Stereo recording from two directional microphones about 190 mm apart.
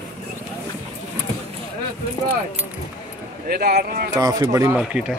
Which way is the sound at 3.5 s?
55° right (ahead or behind).